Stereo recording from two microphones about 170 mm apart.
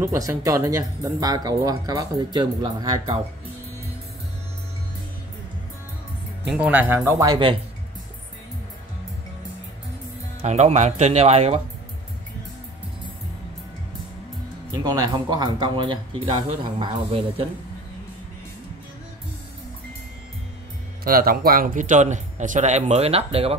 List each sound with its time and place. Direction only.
0.0 s speech: 20° right (ahead or behind)
6.5 s speech: 10° right (ahead or behind); by 7.5 s 25° right (ahead or behind)
10.4 s speech: 40° right (ahead or behind)
14.8 s speech: 25° right (ahead or behind)
21.0 s a man's voice: 60° right (ahead or behind); by 23.5 s 35° right (ahead or behind)